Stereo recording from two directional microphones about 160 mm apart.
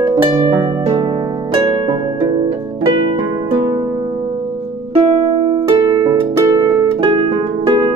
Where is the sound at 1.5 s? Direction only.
30° right (ahead or behind).